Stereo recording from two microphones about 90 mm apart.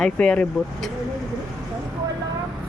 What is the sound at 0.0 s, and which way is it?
Speech, 10° left (ahead or behind).